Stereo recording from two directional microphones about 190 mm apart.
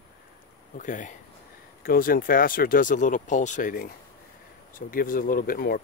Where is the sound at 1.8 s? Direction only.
50° left (ahead or behind).